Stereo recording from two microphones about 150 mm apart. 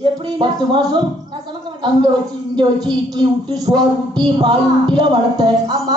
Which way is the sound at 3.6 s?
30° right (ahead or behind).